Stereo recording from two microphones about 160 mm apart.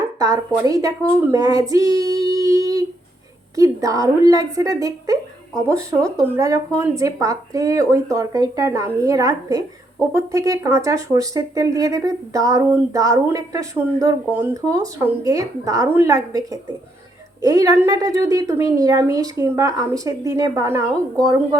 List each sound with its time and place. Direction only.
0.2 s speech: 20° right (ahead or behind)